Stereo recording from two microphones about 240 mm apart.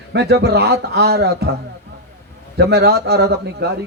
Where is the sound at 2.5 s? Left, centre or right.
Right.